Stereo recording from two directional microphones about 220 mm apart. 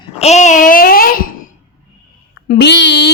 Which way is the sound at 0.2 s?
30° left (ahead or behind).